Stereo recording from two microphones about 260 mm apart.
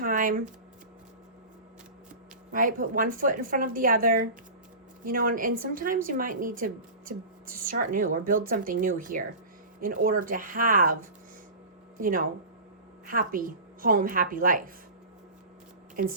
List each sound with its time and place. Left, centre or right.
0.0 s a sound: right
2.5 s a woman's voice: right
11.9 s a woman's voice: right